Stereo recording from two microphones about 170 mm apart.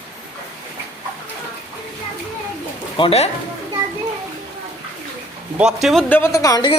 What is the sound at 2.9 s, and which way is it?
Speech, 35° left (ahead or behind).